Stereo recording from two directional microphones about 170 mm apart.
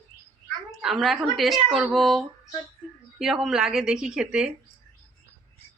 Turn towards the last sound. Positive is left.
turn(degrees=-5)  # may be behind; listen again after turning